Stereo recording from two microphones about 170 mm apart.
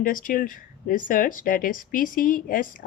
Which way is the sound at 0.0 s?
50° left (ahead or behind).